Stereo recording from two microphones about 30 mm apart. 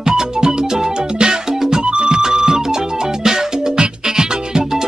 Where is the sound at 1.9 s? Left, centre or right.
Right.